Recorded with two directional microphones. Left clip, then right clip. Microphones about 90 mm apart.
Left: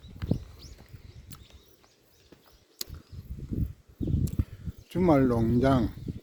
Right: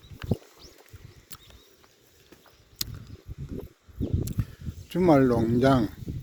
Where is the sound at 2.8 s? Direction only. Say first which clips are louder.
Right 6 dB; 5° right (ahead or behind).